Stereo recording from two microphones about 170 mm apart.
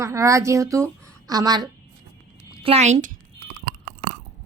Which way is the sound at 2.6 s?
40° right (ahead or behind).